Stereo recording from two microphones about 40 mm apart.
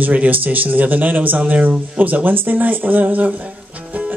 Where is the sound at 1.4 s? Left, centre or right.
Right.